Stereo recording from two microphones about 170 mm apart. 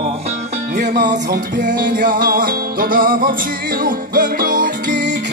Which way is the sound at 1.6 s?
50° right (ahead or behind).